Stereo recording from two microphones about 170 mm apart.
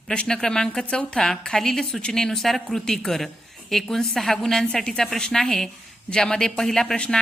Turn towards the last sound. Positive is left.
turn(degrees=5)  # may be behind; listen again after turning